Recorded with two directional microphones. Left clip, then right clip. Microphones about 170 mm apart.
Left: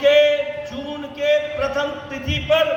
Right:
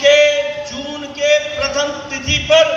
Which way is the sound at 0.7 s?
85° left.